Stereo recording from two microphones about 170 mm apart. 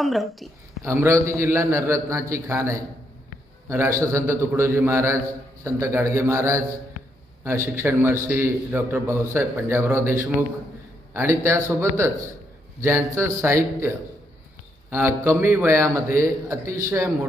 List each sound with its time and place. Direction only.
0.0 s a woman's voice: centre (ahead or behind)
0.8 s a man's voice: 15° right (ahead or behind)